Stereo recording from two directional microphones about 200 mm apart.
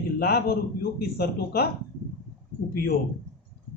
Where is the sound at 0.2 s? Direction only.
55° left (ahead or behind).